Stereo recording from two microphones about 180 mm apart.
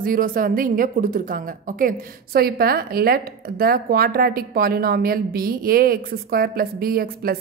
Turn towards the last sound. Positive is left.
turn(degrees=-55)  # may be behind; listen again after turning